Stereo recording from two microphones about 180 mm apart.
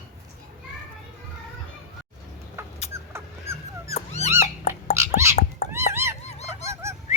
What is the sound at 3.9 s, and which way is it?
Dog, 35° left (ahead or behind).